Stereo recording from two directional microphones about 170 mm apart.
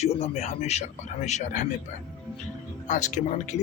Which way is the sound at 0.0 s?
40° left (ahead or behind).